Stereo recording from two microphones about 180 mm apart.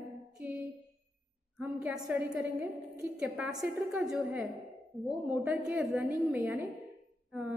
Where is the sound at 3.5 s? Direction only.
20° right (ahead or behind).